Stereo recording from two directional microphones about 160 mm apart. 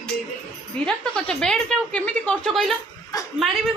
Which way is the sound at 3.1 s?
20° left (ahead or behind).